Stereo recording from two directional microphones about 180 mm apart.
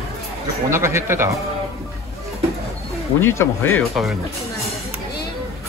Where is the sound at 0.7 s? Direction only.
15° right (ahead or behind).